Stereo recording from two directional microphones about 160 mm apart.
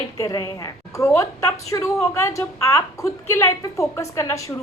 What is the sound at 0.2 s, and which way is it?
A woman's voice, 20° left (ahead or behind).